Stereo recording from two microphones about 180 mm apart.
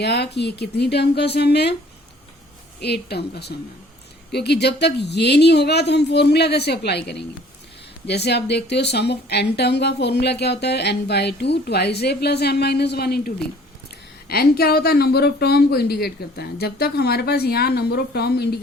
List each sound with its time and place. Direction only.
0.0 s speech: 70° left (ahead or behind)
2.8 s speech: 65° left (ahead or behind)